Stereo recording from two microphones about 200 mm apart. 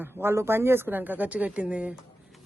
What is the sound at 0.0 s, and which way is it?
Speech, 10° right (ahead or behind).